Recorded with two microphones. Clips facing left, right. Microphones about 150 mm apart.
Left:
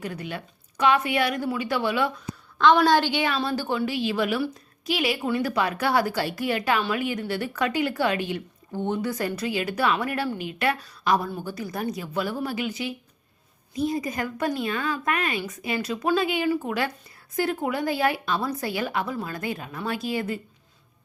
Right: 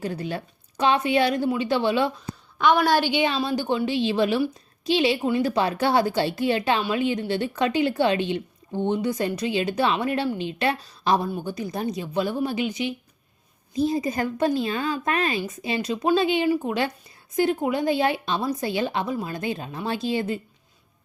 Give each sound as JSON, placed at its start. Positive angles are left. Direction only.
{"t": 0.0, "sound": "speech", "side_deg": -30}
{"t": 2.6, "sound": "speech", "side_deg": -10}